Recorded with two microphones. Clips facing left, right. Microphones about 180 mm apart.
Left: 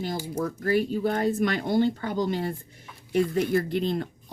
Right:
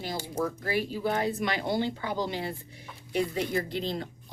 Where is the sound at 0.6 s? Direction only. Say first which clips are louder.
Left 5 dB; 50° left (ahead or behind).